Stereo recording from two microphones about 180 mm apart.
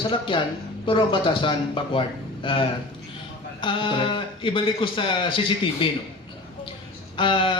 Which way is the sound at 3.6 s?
25° left (ahead or behind).